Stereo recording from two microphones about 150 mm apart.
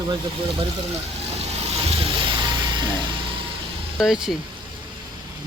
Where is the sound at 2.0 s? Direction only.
35° right (ahead or behind).